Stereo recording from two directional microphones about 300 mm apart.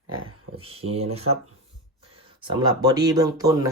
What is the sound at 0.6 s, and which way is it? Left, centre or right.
Speech, centre.